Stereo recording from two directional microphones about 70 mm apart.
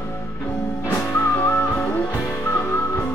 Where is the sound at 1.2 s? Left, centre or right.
Left.